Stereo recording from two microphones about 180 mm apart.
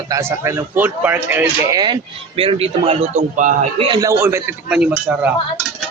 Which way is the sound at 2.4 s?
30° right (ahead or behind).